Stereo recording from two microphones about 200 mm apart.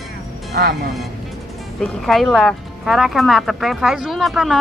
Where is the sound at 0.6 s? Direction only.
45° right (ahead or behind).